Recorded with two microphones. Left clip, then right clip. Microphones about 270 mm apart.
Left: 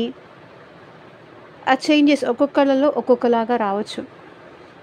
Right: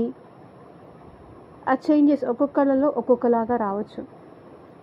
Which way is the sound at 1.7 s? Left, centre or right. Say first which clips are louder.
Left 3 dB; left.